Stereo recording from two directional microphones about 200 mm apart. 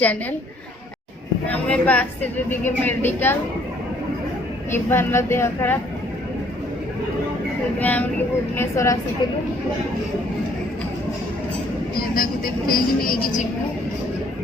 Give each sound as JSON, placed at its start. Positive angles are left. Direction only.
{"t": 1.5, "sound": "a woman's voice", "side_deg": 5}
{"t": 4.7, "sound": "a woman's voice", "side_deg": 10}
{"t": 7.8, "sound": "a woman's voice", "side_deg": 10}
{"t": 11.9, "sound": "speech", "side_deg": 45}